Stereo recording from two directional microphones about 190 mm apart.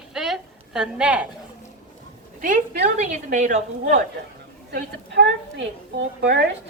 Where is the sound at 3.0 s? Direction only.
40° right (ahead or behind).